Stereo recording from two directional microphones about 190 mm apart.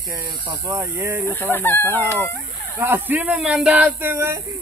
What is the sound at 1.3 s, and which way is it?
Speech, 10° left (ahead or behind).